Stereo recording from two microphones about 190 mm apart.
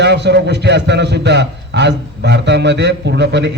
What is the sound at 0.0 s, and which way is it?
A man's voice, 65° right (ahead or behind).